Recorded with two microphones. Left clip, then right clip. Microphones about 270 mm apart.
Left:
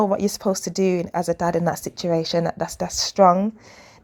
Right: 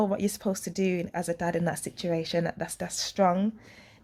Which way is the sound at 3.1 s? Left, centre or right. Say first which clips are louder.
Left 10 dB; centre.